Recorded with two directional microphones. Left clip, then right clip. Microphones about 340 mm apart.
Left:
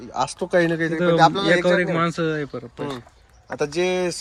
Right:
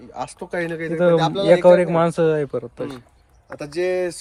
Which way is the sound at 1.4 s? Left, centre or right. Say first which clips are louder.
Right 5 dB; centre.